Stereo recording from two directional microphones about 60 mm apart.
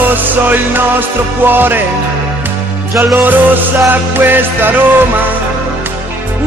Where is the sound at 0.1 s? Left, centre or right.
Right.